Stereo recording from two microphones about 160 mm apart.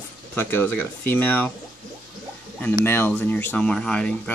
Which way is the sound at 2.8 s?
15° left (ahead or behind).